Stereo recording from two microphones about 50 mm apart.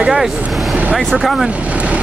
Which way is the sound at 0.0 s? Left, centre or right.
Centre.